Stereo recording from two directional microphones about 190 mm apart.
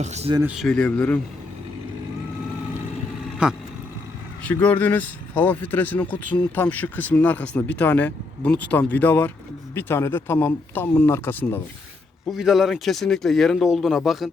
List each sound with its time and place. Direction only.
0.0 s speech: 35° right (ahead or behind)
0.4 s speech: centre (ahead or behind)
3.4 s speech: 5° right (ahead or behind)
4.4 s speech: 10° left (ahead or behind)
12.3 s speech: centre (ahead or behind)